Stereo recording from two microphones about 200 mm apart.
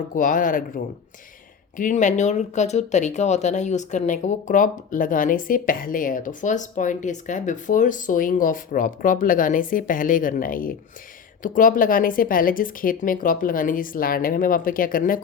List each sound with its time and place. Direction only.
0.1 s speech: 40° left (ahead or behind)
1.7 s speech: 40° left (ahead or behind)